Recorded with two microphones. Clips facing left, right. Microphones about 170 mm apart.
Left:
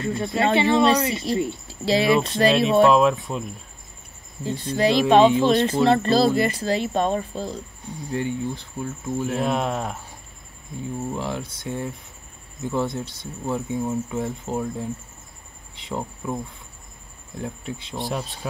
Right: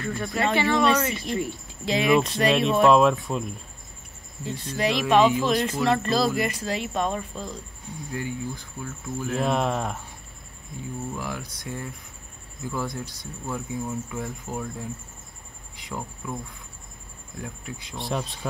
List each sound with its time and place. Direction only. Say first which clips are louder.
0.0 s speech: left 4 dB; 25° left (ahead or behind)
2.1 s speech: left 2 dB; centre (ahead or behind)
4.5 s speech: left 5 dB; 30° left (ahead or behind)
9.4 s speech: right 3 dB; centre (ahead or behind)
11.1 s speech: left 5 dB; 25° left (ahead or behind)
17.4 s speech: left 5 dB; 25° left (ahead or behind)
17.9 s speech: even; centre (ahead or behind)